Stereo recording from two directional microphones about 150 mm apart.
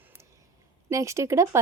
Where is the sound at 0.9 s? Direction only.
20° right (ahead or behind).